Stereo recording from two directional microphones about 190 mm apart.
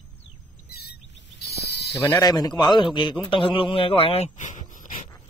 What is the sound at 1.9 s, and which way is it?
A man's voice, 15° left (ahead or behind).